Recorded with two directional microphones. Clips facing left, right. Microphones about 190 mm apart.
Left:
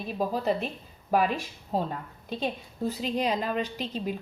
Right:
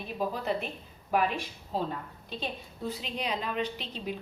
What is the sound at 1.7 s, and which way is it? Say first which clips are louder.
A woman's voice: left 3 dB; 45° left (ahead or behind).